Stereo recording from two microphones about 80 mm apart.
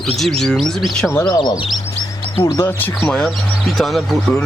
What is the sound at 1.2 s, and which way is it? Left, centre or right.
Speech, left.